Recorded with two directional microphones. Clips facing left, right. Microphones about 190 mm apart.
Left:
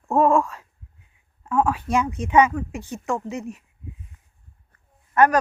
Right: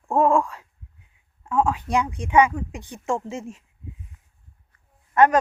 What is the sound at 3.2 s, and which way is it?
Speech, 25° right (ahead or behind).